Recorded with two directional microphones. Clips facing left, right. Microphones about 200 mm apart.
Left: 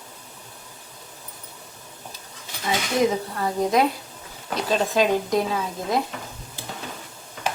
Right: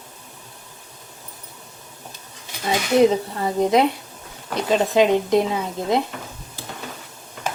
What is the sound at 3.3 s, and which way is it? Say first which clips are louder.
Speech: even; 20° right (ahead or behind).